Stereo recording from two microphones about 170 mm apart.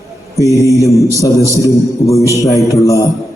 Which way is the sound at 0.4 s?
20° left (ahead or behind).